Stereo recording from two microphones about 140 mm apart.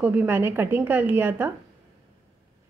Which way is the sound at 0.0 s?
15° right (ahead or behind).